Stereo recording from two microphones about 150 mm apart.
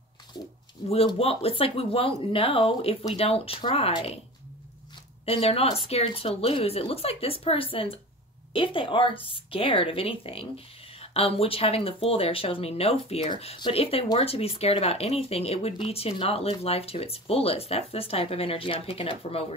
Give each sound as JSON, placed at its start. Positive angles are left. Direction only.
{"t": 0.3, "sound": "a sound", "side_deg": 25}
{"t": 0.8, "sound": "speech", "side_deg": 40}
{"t": 5.2, "sound": "speech", "side_deg": 40}